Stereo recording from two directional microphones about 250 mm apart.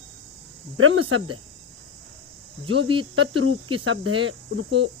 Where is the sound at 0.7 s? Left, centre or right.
Right.